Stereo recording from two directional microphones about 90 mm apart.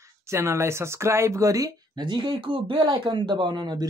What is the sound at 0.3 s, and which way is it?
Speech, 30° right (ahead or behind).